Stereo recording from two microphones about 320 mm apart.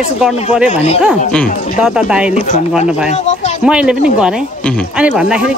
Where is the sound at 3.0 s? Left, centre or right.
Left.